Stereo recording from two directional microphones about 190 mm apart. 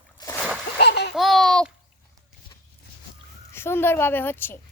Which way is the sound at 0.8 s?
60° left (ahead or behind).